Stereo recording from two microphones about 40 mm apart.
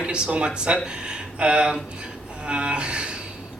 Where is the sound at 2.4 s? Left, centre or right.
Right.